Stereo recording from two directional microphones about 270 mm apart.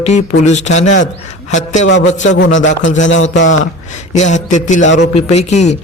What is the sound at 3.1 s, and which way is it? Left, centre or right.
Speech, left.